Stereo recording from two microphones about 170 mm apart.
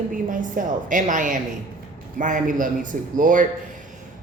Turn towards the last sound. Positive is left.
turn(degrees=-50)  # may be behind; listen again after turning